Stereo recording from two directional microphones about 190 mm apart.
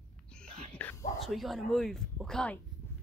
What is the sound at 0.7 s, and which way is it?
Whispering, 10° left (ahead or behind).